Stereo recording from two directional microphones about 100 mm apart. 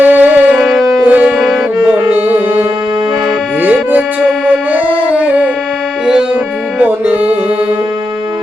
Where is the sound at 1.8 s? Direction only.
20° right (ahead or behind).